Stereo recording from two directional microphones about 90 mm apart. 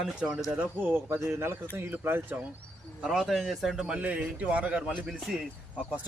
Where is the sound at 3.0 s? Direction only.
5° right (ahead or behind).